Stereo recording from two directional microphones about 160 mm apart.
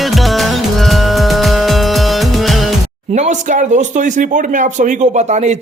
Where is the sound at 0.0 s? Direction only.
Centre (ahead or behind).